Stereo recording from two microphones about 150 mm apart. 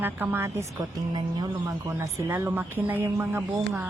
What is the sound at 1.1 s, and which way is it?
Speech, 25° right (ahead or behind).